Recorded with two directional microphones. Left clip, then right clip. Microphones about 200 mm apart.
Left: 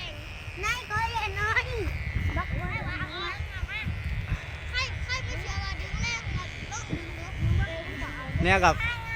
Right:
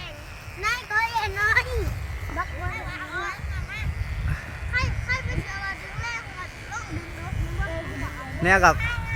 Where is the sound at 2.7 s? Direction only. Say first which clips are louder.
Right 2 dB; 40° right (ahead or behind).